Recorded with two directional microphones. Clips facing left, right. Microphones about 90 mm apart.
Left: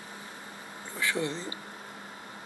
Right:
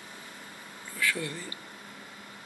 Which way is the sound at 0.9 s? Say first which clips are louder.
Left 1 dB; 25° left (ahead or behind).